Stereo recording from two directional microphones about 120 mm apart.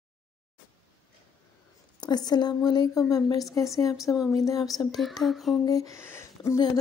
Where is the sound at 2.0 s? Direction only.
35° left (ahead or behind).